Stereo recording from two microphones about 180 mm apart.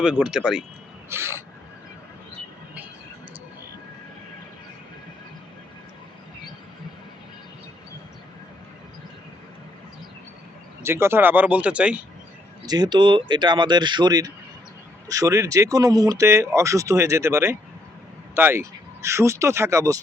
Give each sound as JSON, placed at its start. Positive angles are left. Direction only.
{"t": 0.0, "sound": "speech", "side_deg": -5}
{"t": 1.1, "sound": "speech", "side_deg": -15}
{"t": 10.8, "sound": "speech", "side_deg": -15}
{"t": 12.6, "sound": "speech", "side_deg": -25}